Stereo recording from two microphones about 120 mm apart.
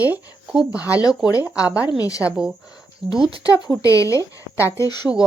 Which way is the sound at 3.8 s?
25° left (ahead or behind).